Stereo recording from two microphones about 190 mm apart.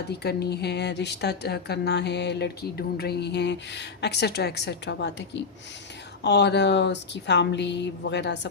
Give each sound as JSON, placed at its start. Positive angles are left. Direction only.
{"t": 0.1, "sound": "speech", "side_deg": 60}